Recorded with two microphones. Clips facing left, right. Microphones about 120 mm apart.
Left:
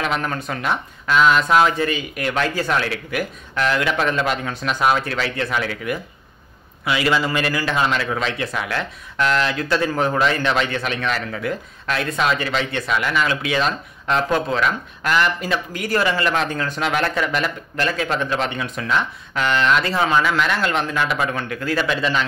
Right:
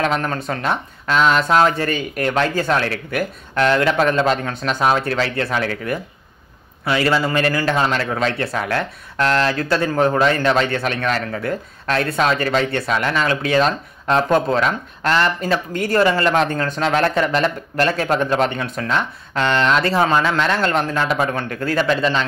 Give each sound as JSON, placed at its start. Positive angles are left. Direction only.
{"t": 0.0, "sound": "speech", "side_deg": -35}
{"t": 3.7, "sound": "speech", "side_deg": -40}
{"t": 9.3, "sound": "speech", "side_deg": -35}
{"t": 17.8, "sound": "speech", "side_deg": -45}
{"t": 19.3, "sound": "speech", "side_deg": -35}